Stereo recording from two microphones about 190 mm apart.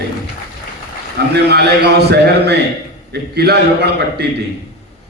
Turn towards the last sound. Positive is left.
turn(degrees=-60)  # may be behind; listen again after turning